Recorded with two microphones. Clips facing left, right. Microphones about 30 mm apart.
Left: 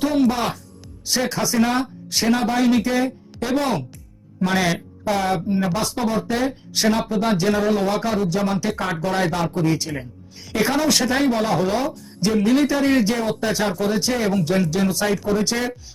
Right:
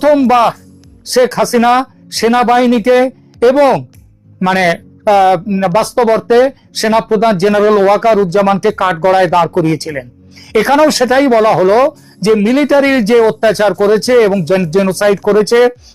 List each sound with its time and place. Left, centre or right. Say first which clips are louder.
0.3 s speech: right 13 dB; right
1.5 s speech: right 10 dB; right
2.6 s speech: right 10 dB; right
5.0 s speech: right 13 dB; right
7.1 s speech: right 10 dB; right
9.7 s speech: right 7 dB; right
10.5 s speech: right 11 dB; right